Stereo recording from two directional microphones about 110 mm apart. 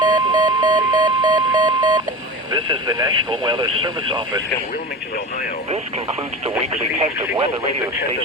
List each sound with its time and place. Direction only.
0.1 s alarm clock: 40° right (ahead or behind)
2.5 s speech: 40° right (ahead or behind)